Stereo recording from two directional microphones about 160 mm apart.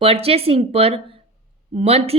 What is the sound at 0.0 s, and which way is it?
A woman's voice, 35° right (ahead or behind).